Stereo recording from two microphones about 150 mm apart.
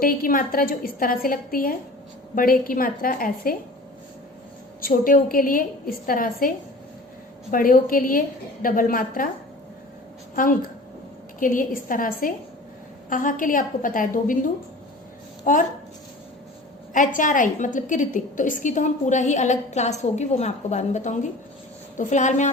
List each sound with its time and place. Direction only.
0.0 s a woman's voice: 70° left (ahead or behind)
4.8 s a woman's voice: 65° left (ahead or behind)
7.5 s a woman's voice: 70° left (ahead or behind)
11.3 s a woman's voice: 65° left (ahead or behind)
16.9 s a woman's voice: 60° left (ahead or behind)